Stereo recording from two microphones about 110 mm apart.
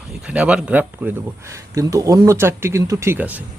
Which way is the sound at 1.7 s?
30° right (ahead or behind).